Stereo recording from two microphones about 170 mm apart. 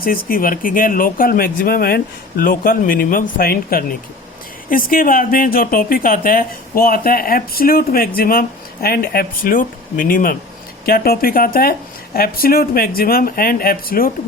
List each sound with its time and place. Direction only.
0.0 s speech: 60° left (ahead or behind)